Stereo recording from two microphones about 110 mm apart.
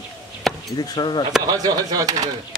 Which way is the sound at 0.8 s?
40° left (ahead or behind).